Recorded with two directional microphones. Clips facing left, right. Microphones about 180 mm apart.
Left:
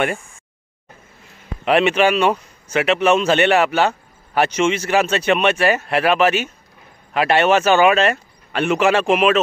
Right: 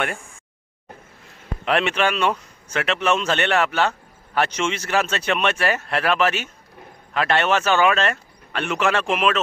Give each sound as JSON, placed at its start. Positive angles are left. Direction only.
{"t": 1.6, "sound": "a man's voice", "side_deg": 5}